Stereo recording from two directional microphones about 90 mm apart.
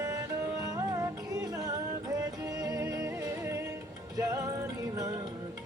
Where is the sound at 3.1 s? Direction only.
30° right (ahead or behind).